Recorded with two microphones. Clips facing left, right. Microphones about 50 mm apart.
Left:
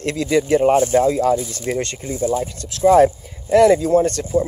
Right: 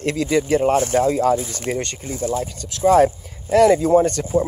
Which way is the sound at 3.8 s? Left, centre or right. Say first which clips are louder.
Right 1 dB; centre.